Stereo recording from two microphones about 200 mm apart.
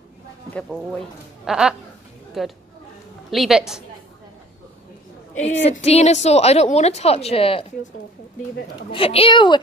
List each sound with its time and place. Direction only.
1.4 s a woman's voice: 5° right (ahead or behind)
5.4 s a woman's voice: 35° left (ahead or behind)
8.9 s a woman's voice: 25° left (ahead or behind)